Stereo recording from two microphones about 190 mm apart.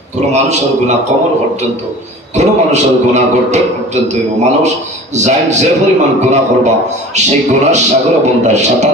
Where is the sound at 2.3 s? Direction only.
40° right (ahead or behind).